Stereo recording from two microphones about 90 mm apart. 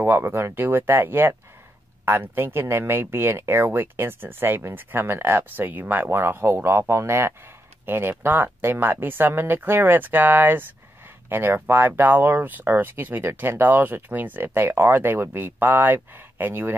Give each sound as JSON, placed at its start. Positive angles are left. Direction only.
{"t": 0.0, "sound": "speech", "side_deg": -25}